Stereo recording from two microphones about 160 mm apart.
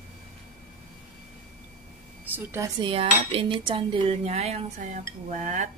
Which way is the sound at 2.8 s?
35° right (ahead or behind).